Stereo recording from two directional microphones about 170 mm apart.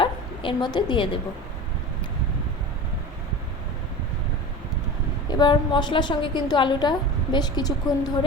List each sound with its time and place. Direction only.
0.0 s a woman's voice: 30° left (ahead or behind)
5.3 s a woman's voice: 25° left (ahead or behind)